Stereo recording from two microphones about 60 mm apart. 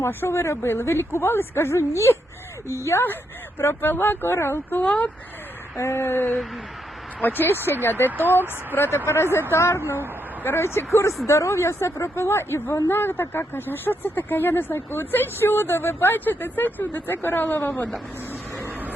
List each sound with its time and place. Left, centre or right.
0.0 s speech: left
3.6 s speech: left
4.8 s speech: left
5.7 s speech: left